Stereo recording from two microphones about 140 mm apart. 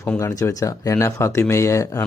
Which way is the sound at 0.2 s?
20° left (ahead or behind).